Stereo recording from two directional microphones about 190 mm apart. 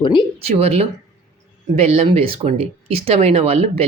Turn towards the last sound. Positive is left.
turn(degrees=-35)  # may be behind; listen again after turning